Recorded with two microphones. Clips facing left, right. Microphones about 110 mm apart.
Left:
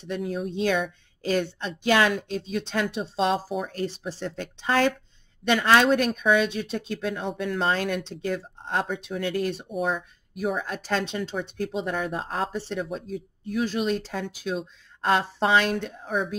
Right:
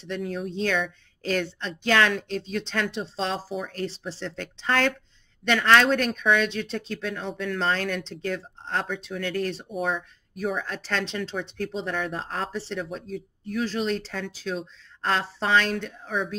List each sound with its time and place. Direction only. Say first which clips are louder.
0.0 s speech: left 1 dB; 10° left (ahead or behind)
9.7 s speech: left 1 dB; centre (ahead or behind)
10.6 s speech: left 2 dB; 15° left (ahead or behind)